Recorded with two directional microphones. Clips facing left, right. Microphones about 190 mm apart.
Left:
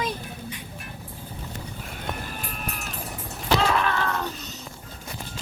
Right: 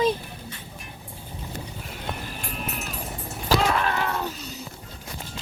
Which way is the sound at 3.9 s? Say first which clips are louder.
Even; 15° right (ahead or behind).